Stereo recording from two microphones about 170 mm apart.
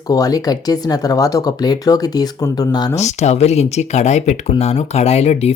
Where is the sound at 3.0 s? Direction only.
40° left (ahead or behind).